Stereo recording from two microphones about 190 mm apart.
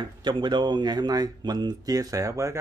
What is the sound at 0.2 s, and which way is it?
Speech, 25° right (ahead or behind).